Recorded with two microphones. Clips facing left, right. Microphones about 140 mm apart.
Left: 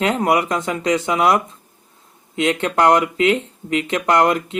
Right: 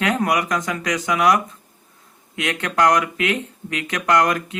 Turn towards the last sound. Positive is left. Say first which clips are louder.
# left 2 dB
turn(degrees=25)  # may be behind; listen again after turning